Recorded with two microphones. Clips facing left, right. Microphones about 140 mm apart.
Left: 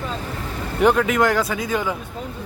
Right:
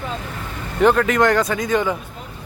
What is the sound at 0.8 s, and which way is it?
Speech, 10° left (ahead or behind).